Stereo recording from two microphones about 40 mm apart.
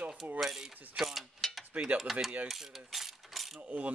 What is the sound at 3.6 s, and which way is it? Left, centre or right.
Speech, right.